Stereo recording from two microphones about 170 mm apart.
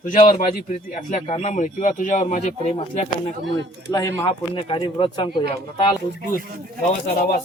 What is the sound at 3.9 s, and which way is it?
Speech, 20° left (ahead or behind).